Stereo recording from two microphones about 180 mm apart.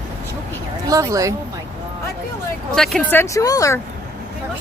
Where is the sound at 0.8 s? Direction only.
20° right (ahead or behind).